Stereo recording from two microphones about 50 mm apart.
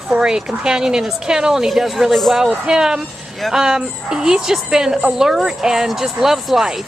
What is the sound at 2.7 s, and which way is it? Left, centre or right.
Speech, centre.